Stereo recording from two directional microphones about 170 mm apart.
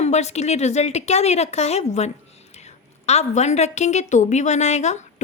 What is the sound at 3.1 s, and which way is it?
A woman's voice, 40° left (ahead or behind).